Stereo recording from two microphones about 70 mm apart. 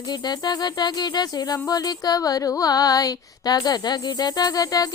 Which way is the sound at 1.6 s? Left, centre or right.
Left.